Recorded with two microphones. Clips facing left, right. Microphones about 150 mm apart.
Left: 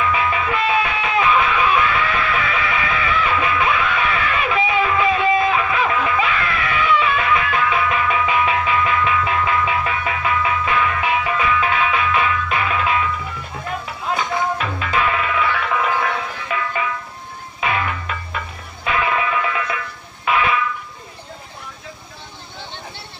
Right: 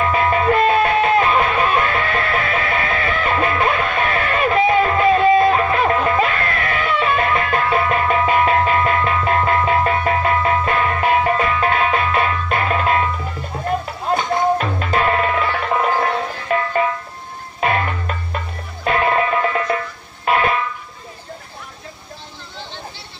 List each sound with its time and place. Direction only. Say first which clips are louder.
0.0 s music: right 4 dB; 45° right (ahead or behind)